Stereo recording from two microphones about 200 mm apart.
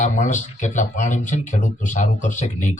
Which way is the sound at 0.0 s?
35° left (ahead or behind).